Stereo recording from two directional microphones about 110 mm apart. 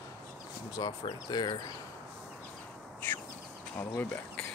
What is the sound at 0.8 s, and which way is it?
Speech, 40° left (ahead or behind).